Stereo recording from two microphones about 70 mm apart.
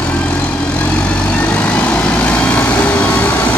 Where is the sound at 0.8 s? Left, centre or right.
Centre.